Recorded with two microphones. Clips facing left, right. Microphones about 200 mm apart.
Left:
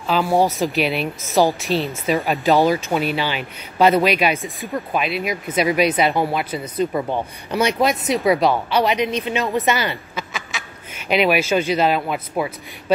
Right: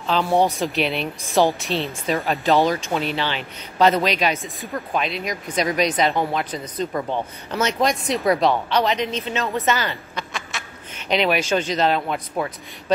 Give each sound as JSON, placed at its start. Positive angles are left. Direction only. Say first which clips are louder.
{"t": 0.0, "sound": "speech", "louder": "left 1 dB", "side_deg": 5}
{"t": 10.1, "sound": "speech", "louder": "left 1 dB", "side_deg": 5}